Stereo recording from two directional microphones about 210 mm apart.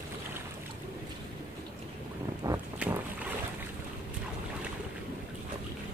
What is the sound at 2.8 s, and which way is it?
Boat, 5° right (ahead or behind).